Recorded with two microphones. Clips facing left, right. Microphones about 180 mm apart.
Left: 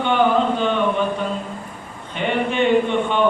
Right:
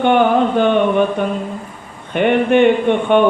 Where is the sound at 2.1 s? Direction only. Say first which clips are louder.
Right 8 dB; 60° right (ahead or behind).